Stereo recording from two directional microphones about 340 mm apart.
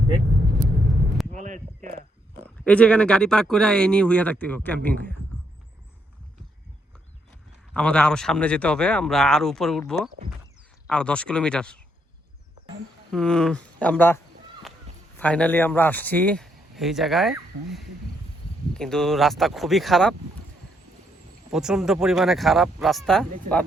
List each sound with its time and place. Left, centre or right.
1.3 s a sound: right
2.6 s speech: centre
7.7 s speech: centre
13.1 s speech: centre
15.2 s speech: centre
21.5 s speech: centre